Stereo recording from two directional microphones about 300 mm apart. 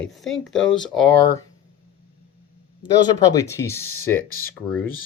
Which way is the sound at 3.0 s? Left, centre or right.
Centre.